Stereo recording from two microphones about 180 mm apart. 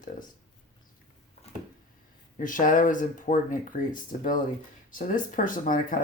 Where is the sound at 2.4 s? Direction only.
45° left (ahead or behind).